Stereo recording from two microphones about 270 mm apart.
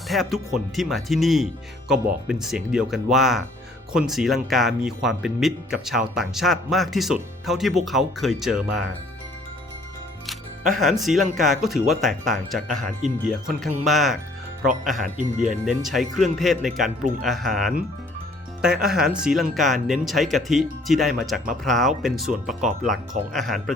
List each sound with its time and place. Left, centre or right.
0.1 s speech: centre
10.8 s speech: centre
12.6 s speech: right
13.2 s speech: centre
15.4 s speech: centre